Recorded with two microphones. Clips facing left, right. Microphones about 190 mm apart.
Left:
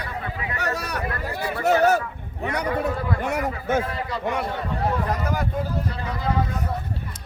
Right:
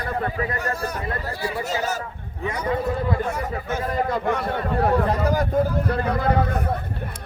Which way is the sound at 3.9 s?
50° right (ahead or behind).